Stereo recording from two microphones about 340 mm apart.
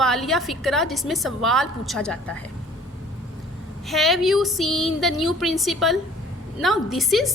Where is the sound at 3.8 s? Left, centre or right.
Centre.